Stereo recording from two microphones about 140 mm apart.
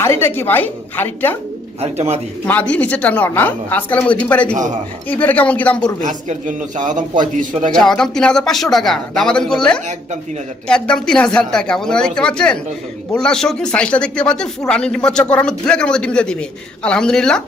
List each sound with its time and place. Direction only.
0.0 s speech: 20° left (ahead or behind)
1.8 s a man's voice: 50° right (ahead or behind)
2.5 s speech: 10° left (ahead or behind)
4.5 s a man's voice: 60° right (ahead or behind)
5.0 s speech: 10° left (ahead or behind)
6.1 s a man's voice: 65° right (ahead or behind)
7.8 s speech: 5° left (ahead or behind)